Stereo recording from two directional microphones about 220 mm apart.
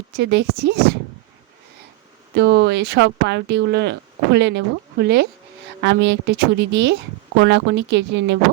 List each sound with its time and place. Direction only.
0.2 s speech: 50° right (ahead or behind)
2.3 s speech: 50° right (ahead or behind)